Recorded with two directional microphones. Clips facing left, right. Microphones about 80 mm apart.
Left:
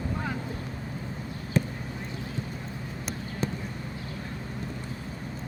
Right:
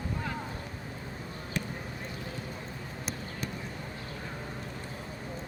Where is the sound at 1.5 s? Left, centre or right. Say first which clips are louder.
Left 9 dB; left.